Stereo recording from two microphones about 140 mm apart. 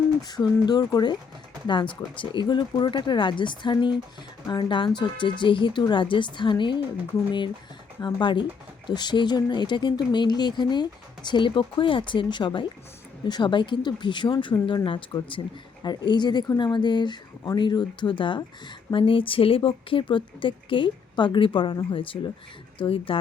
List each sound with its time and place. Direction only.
0.2 s speech: 30° left (ahead or behind)
8.0 s speech: 35° left (ahead or behind)